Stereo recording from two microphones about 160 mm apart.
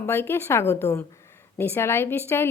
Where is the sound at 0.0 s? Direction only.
15° left (ahead or behind).